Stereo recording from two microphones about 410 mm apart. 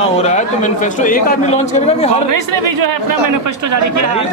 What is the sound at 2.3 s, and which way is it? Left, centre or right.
Speech, right.